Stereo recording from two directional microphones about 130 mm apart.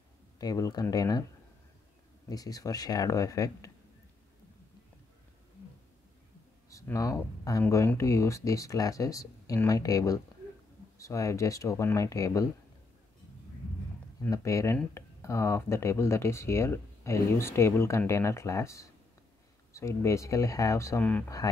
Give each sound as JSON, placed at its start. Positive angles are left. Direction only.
{"t": 0.4, "sound": "speech", "side_deg": 30}
{"t": 2.2, "sound": "speech", "side_deg": 30}
{"t": 6.7, "sound": "speech", "side_deg": 25}
{"t": 14.3, "sound": "speech", "side_deg": 25}